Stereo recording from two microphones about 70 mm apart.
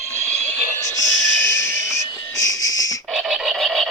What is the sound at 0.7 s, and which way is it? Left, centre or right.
Music, right.